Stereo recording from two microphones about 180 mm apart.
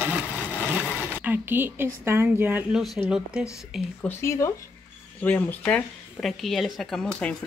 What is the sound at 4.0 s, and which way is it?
Speech, 15° left (ahead or behind).